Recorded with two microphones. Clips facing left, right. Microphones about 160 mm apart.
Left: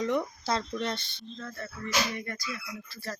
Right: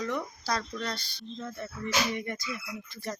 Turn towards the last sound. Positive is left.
turn(degrees=-20)  # may be behind; listen again after turning